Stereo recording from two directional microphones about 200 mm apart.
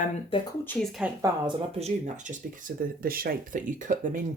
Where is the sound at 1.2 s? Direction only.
25° right (ahead or behind).